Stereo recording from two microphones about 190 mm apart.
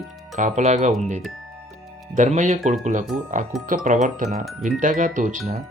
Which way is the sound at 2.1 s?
40° right (ahead or behind).